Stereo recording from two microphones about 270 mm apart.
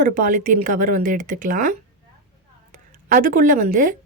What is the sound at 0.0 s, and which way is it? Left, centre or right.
A woman's voice, right.